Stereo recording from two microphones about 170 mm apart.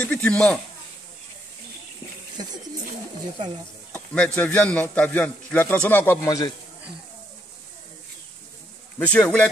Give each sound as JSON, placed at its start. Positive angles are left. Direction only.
{"t": 0.0, "sound": "a man's voice", "side_deg": 10}
{"t": 3.9, "sound": "a man's voice", "side_deg": 5}
{"t": 8.9, "sound": "a man's voice", "side_deg": 10}